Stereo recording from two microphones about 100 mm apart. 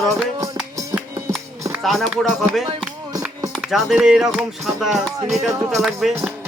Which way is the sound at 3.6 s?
5° right (ahead or behind).